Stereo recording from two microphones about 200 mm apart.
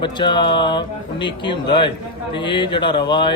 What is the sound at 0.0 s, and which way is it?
Speech, 25° left (ahead or behind).